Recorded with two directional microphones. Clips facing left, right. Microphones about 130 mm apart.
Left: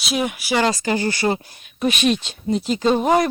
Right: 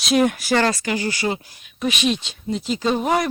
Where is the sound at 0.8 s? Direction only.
35° left (ahead or behind).